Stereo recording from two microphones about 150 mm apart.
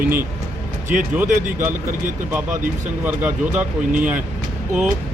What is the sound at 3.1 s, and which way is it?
Speech, 10° right (ahead or behind).